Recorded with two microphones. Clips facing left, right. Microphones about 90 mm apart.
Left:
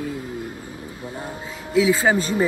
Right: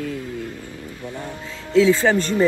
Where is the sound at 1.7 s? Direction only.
15° left (ahead or behind).